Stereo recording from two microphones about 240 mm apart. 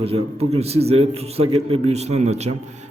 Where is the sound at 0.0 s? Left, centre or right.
Right.